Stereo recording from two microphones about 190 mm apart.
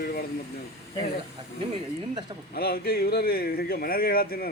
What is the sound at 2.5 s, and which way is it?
Speech, 55° left (ahead or behind).